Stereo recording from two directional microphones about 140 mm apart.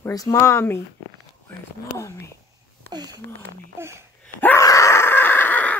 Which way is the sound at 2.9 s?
30° right (ahead or behind).